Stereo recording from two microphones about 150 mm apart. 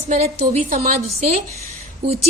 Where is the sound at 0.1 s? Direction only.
45° right (ahead or behind).